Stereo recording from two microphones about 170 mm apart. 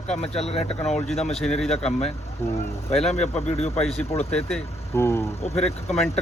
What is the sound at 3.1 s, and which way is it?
Speech, 40° left (ahead or behind).